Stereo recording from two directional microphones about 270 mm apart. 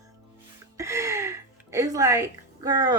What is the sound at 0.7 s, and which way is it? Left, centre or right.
Speech, centre.